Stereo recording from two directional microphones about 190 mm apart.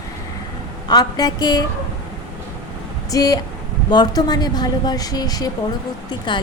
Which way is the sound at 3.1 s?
20° left (ahead or behind).